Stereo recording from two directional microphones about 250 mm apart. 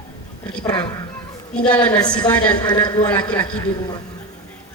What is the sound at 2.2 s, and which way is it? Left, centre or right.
A woman's voice, centre.